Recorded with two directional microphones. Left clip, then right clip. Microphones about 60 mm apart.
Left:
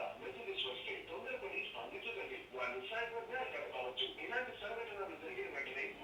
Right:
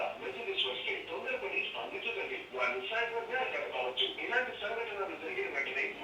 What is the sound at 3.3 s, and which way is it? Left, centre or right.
Speech, right.